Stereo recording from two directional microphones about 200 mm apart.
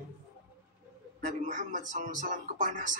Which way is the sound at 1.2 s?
40° right (ahead or behind).